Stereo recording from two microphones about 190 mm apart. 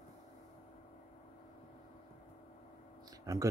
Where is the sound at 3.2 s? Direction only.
15° right (ahead or behind).